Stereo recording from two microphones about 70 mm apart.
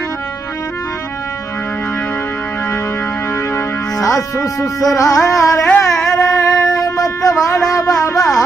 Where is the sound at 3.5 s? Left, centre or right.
Left.